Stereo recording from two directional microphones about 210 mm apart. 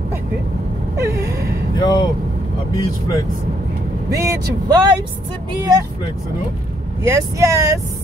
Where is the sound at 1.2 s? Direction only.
50° right (ahead or behind).